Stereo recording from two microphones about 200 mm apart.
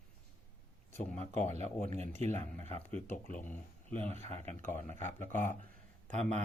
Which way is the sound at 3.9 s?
30° right (ahead or behind).